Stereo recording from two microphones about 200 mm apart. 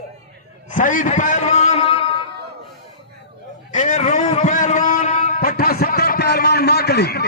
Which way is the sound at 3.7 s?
40° left (ahead or behind).